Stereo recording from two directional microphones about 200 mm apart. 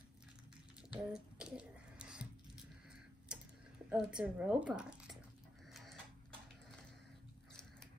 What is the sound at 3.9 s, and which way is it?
Speech, 5° right (ahead or behind).